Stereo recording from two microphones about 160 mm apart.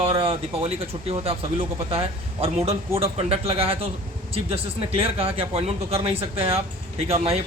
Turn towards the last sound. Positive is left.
turn(degrees=-40)  # may be behind; listen again after turning